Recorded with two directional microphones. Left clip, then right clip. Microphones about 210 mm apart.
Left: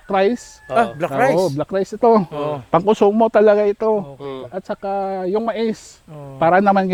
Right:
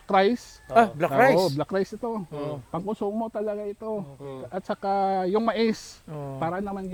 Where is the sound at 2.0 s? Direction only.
55° left (ahead or behind).